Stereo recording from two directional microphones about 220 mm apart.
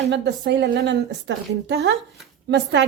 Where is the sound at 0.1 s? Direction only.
50° right (ahead or behind).